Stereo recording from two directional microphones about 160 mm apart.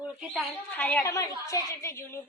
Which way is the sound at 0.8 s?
10° left (ahead or behind).